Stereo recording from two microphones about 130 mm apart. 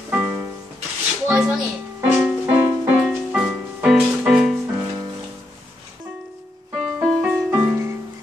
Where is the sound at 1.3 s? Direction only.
5° right (ahead or behind).